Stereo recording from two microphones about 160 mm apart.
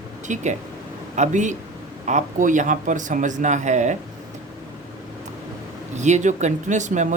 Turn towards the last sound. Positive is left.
turn(degrees=-50)  # may be behind; listen again after turning